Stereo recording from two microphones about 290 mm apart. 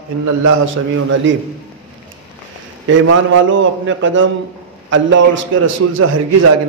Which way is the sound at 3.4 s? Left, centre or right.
Right.